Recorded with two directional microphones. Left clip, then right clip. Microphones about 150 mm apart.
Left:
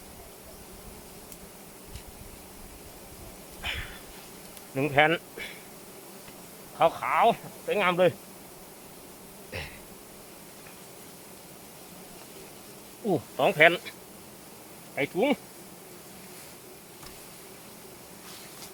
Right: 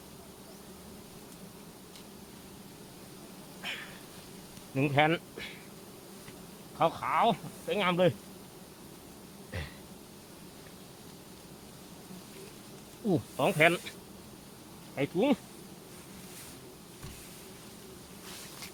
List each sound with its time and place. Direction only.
3.6 s a sound: 10° right (ahead or behind)
4.7 s speech: 15° right (ahead or behind)
6.7 s speech: 10° right (ahead or behind)
13.1 s speech: 5° right (ahead or behind)
14.9 s speech: 15° right (ahead or behind)